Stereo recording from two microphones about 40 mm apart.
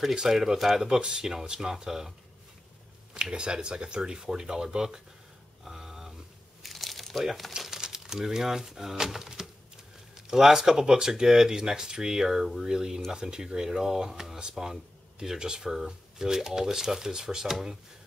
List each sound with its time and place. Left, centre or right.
0.3 s speech: centre
0.8 s speech: centre
3.2 s speech: right
5.7 s a sound: centre
6.6 s crumpling: centre
7.5 s speech: centre